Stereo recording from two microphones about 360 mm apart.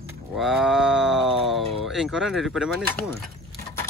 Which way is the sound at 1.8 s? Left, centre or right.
Centre.